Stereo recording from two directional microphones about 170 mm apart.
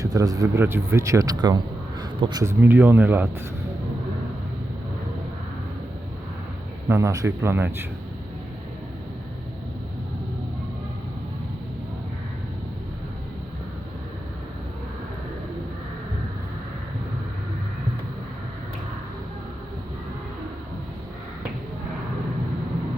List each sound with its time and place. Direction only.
0.0 s speech: 20° right (ahead or behind)
6.8 s speech: 15° right (ahead or behind)